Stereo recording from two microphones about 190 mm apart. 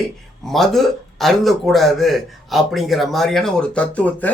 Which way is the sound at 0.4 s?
Centre (ahead or behind).